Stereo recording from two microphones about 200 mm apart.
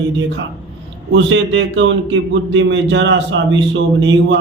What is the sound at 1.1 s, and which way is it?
A man's voice, 65° right (ahead or behind).